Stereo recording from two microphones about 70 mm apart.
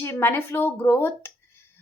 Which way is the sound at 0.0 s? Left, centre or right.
Left.